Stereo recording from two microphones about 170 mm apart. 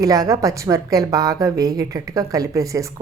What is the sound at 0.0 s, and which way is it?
A woman's voice, 20° right (ahead or behind).